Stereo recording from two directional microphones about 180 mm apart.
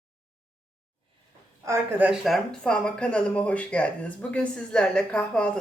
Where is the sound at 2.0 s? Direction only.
Centre (ahead or behind).